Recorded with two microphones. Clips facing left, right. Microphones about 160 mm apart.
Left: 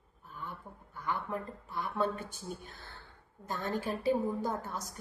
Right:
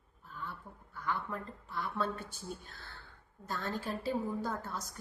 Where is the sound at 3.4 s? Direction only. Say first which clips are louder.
Left 3 dB; 15° left (ahead or behind).